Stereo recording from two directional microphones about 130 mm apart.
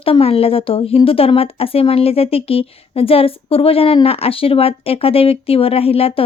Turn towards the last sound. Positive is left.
turn(degrees=45)  # may be behind; listen again after turning